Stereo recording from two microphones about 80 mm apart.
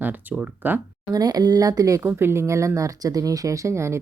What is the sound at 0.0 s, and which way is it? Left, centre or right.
Speech, right.